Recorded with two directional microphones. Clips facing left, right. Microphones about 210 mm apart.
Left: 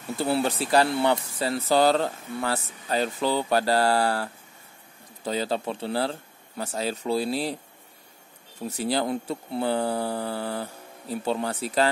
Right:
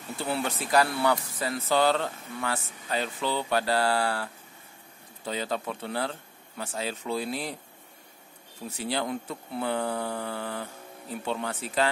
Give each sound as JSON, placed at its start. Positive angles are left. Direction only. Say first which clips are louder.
{"t": 0.2, "sound": "speech", "louder": "left 6 dB", "side_deg": 35}
{"t": 8.6, "sound": "speech", "louder": "left 5 dB", "side_deg": 40}